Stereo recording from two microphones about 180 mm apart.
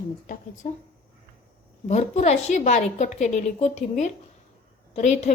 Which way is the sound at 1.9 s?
40° left (ahead or behind).